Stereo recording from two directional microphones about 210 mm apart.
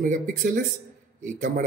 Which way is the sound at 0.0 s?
40° right (ahead or behind).